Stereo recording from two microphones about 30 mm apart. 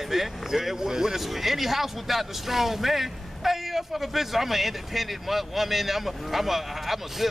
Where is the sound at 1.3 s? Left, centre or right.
Centre.